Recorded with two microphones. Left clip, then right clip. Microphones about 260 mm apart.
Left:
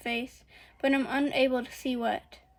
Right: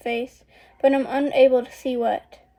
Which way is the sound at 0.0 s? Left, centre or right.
Centre.